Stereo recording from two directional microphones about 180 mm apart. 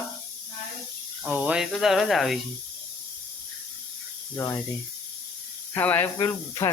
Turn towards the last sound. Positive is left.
turn(degrees=20)  # may be behind; listen again after turning